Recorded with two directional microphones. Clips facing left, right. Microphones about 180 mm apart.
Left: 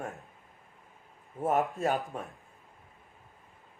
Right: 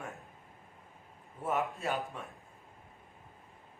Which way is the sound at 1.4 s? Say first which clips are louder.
Left 6 dB; 40° left (ahead or behind).